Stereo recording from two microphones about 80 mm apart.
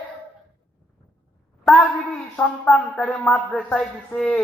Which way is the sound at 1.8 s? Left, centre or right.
Centre.